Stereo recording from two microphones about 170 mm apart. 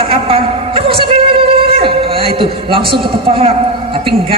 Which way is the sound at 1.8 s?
30° right (ahead or behind).